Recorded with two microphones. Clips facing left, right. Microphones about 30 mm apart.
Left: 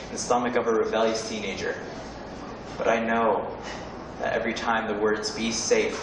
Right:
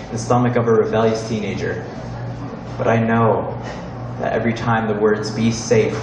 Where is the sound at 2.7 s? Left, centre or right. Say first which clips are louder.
Right 7 dB; centre.